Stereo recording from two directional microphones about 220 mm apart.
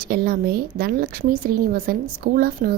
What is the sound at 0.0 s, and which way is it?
A woman's voice, 40° right (ahead or behind).